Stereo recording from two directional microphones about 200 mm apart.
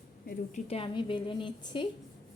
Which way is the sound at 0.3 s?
35° left (ahead or behind).